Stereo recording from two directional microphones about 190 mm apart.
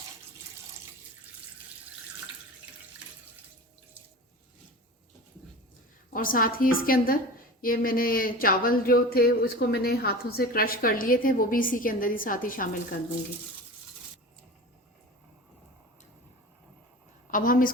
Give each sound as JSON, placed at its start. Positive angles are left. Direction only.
{"t": 6.1, "sound": "speech", "side_deg": 45}
{"t": 17.3, "sound": "speech", "side_deg": 45}